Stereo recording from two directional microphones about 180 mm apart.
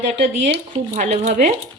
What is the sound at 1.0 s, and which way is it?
Speech, 40° right (ahead or behind).